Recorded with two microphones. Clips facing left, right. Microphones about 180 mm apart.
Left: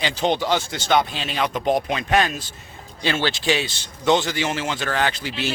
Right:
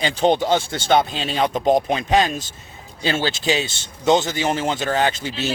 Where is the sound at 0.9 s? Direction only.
25° right (ahead or behind).